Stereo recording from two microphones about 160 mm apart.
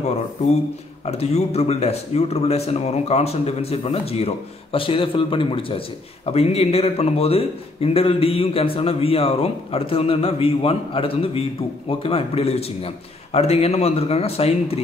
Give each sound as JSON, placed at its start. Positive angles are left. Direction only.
{"t": 1.0, "sound": "a man's voice", "side_deg": 40}